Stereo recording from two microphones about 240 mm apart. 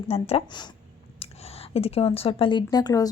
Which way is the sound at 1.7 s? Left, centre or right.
Left.